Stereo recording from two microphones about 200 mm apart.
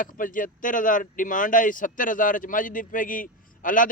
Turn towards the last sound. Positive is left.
turn(degrees=40)  # may be behind; listen again after turning